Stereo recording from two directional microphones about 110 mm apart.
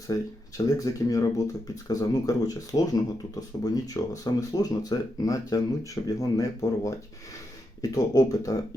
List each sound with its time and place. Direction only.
0.1 s speech: 30° left (ahead or behind)